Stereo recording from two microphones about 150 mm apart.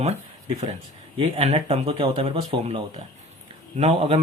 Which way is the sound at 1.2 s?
45° right (ahead or behind).